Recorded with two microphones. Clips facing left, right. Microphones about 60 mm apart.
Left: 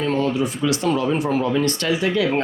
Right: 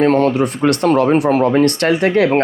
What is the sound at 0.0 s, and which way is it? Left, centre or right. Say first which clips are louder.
Speech: right 8 dB; right.